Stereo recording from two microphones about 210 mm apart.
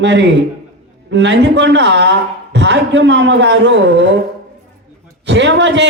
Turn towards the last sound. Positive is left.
turn(degrees=-60)  # may be behind; listen again after turning